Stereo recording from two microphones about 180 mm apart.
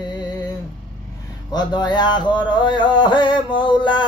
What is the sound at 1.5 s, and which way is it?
Mantra, 25° left (ahead or behind).